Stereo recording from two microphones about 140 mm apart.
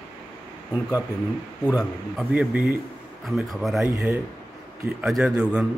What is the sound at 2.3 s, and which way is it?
A man's voice, 10° right (ahead or behind).